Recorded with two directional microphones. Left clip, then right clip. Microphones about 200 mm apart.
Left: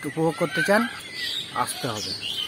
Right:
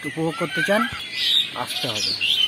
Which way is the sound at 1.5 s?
20° left (ahead or behind).